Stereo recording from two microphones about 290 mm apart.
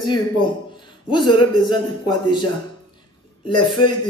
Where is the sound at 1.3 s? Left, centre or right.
Centre.